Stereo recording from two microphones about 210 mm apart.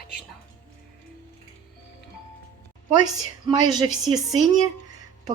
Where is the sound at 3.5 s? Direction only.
20° right (ahead or behind).